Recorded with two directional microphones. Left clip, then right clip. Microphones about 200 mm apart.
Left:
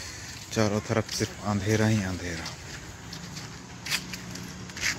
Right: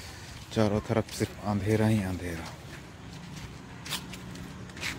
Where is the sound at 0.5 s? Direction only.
15° right (ahead or behind).